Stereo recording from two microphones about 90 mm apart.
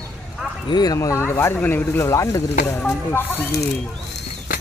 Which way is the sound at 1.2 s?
25° left (ahead or behind).